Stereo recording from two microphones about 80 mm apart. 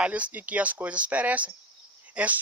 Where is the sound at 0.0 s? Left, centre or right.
Centre.